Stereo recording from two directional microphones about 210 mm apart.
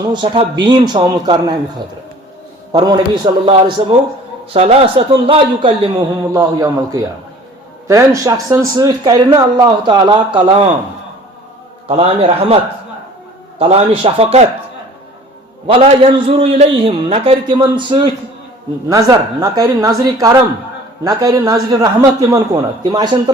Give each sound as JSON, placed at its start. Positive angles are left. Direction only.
{"t": 0.0, "sound": "speech", "side_deg": -20}
{"t": 2.7, "sound": "a man's voice", "side_deg": -20}
{"t": 11.9, "sound": "speech", "side_deg": -30}
{"t": 13.6, "sound": "speech", "side_deg": -30}
{"t": 15.6, "sound": "a man's voice", "side_deg": -25}